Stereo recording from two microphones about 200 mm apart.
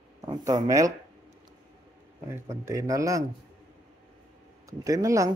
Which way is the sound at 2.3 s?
15° right (ahead or behind).